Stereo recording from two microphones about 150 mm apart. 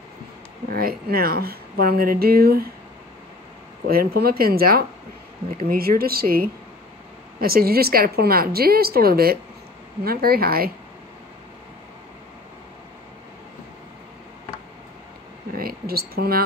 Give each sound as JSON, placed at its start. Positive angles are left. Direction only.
{"t": 0.7, "sound": "a woman's voice", "side_deg": -80}
{"t": 3.8, "sound": "a woman's voice", "side_deg": -85}
{"t": 15.5, "sound": "a sound", "side_deg": -85}